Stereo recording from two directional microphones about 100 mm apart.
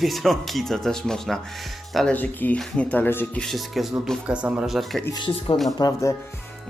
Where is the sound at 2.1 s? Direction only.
15° left (ahead or behind).